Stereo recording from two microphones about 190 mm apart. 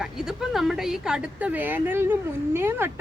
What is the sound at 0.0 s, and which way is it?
A woman's voice, centre (ahead or behind).